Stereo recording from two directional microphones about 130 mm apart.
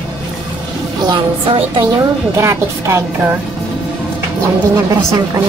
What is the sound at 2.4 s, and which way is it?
Speech, 20° right (ahead or behind).